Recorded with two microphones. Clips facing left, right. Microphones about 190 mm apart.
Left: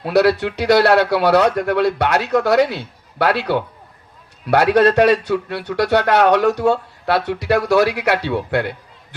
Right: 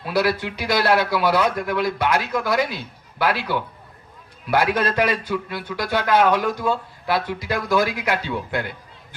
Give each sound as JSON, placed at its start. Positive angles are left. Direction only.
{"t": 0.0, "sound": "speech", "side_deg": 75}